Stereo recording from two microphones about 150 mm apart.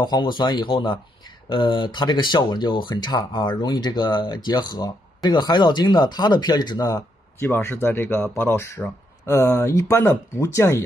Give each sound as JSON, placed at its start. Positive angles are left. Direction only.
{"t": 0.0, "sound": "speech", "side_deg": 30}